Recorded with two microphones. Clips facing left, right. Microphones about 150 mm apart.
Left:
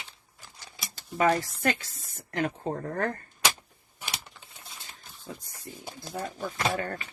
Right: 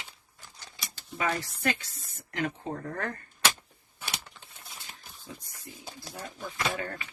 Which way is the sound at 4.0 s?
15° left (ahead or behind).